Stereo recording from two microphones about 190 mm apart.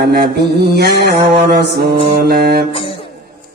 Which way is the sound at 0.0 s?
55° right (ahead or behind).